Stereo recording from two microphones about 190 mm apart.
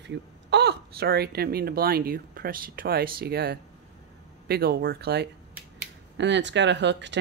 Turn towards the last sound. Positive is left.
turn(degrees=-70)  # may be behind; listen again after turning